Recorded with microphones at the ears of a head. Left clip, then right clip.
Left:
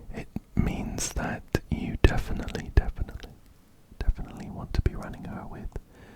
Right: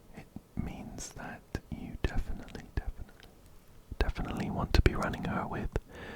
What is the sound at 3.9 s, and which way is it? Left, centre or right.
Whispering, right.